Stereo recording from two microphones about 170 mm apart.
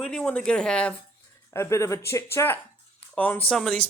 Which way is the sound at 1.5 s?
15° left (ahead or behind).